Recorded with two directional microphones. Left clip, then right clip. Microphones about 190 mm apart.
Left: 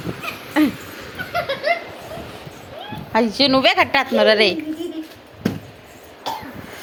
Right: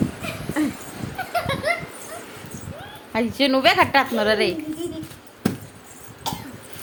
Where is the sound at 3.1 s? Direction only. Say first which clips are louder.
Left 4 dB; 5° left (ahead or behind).